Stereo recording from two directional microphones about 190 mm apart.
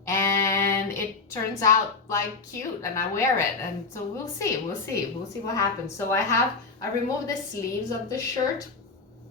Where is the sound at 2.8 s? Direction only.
15° left (ahead or behind).